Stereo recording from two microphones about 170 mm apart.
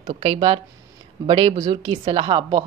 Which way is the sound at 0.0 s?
35° right (ahead or behind).